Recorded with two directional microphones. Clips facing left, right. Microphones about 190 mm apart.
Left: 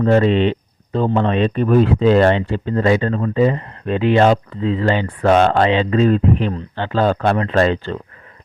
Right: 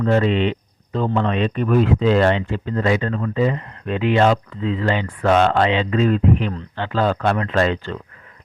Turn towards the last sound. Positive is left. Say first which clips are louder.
# left 3 dB
turn(degrees=35)  # may be behind; listen again after turning